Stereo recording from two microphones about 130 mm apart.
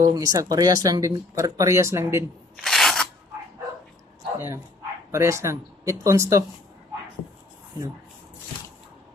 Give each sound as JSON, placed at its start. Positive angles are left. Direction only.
{"t": 0.0, "sound": "speech", "side_deg": -25}
{"t": 2.6, "sound": "a sound", "side_deg": 0}
{"t": 5.1, "sound": "speech", "side_deg": -20}